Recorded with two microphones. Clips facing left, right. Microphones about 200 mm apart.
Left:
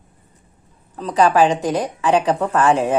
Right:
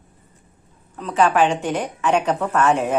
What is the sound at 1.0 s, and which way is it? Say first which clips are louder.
Speech: left 3 dB; 35° left (ahead or behind).